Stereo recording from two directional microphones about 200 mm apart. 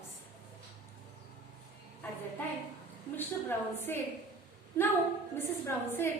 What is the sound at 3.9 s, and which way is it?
Speech, 10° left (ahead or behind).